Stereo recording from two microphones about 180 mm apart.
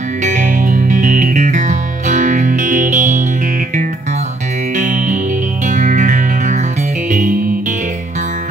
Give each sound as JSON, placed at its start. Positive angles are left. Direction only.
{"t": 0.2, "sound": "music", "side_deg": -45}
{"t": 4.7, "sound": "music", "side_deg": -45}